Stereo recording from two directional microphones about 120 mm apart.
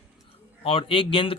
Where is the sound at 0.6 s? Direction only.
50° left (ahead or behind).